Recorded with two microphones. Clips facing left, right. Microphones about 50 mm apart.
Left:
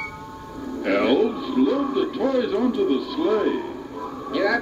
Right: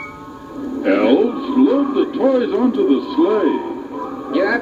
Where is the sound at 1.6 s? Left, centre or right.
Centre.